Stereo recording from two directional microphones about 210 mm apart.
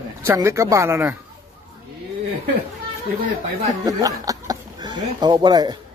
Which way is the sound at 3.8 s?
15° right (ahead or behind).